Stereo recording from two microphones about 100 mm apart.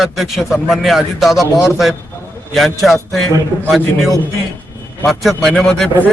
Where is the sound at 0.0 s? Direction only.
Centre (ahead or behind).